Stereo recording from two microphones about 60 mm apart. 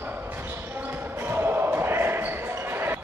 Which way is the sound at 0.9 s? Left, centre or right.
Right.